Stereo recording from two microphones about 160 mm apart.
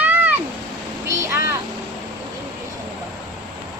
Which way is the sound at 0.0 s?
10° right (ahead or behind).